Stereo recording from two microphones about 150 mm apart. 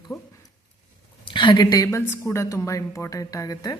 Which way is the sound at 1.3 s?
30° left (ahead or behind).